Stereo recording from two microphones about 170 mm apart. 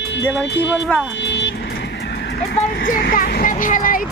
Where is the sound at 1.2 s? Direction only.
90° left.